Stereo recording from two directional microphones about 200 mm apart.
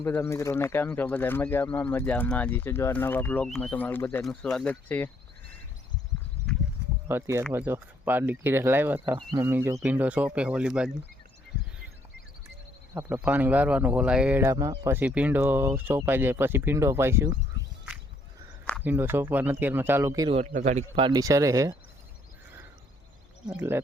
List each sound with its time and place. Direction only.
0.0 s speech: 10° left (ahead or behind)
7.1 s speech: 15° right (ahead or behind)
12.9 s speech: 15° right (ahead or behind)
18.9 s speech: 10° right (ahead or behind)
20.3 s speech: 35° right (ahead or behind)
21.1 s speech: 15° right (ahead or behind)
23.5 s speech: 10° right (ahead or behind)